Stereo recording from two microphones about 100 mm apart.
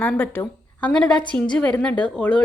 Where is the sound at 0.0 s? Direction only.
15° left (ahead or behind).